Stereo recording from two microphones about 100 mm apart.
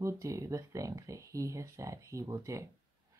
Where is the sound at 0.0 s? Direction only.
35° right (ahead or behind).